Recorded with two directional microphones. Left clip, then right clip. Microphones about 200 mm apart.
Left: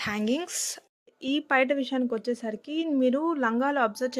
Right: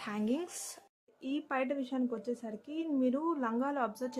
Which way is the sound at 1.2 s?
30° left (ahead or behind).